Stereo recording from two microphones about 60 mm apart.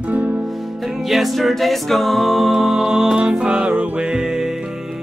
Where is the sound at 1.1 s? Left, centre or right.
Centre.